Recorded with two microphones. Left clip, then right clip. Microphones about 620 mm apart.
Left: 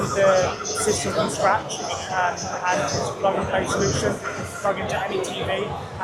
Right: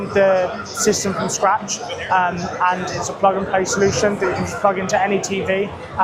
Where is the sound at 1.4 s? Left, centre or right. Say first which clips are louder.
Right 4 dB; right.